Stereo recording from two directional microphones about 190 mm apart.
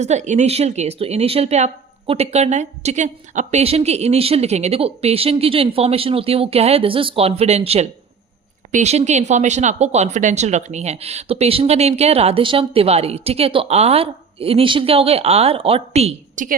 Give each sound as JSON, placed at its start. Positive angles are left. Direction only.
{"t": 0.0, "sound": "speech", "side_deg": -35}